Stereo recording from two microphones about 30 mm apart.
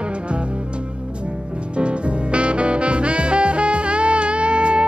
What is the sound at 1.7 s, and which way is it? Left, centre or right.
Music, right.